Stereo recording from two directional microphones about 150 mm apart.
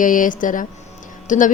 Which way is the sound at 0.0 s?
60° left (ahead or behind).